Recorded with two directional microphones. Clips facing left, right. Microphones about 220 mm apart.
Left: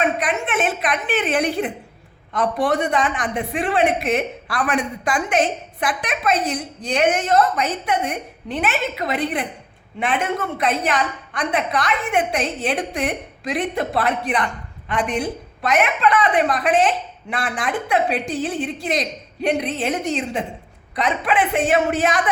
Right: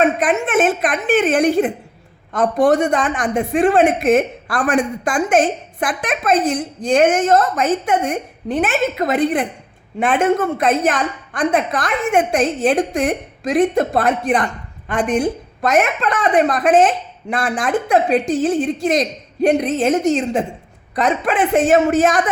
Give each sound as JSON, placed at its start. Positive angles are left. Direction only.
{"t": 0.0, "sound": "a woman's voice", "side_deg": -50}